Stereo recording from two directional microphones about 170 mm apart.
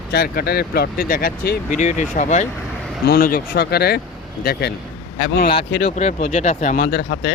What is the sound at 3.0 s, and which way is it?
Speech, 60° left (ahead or behind).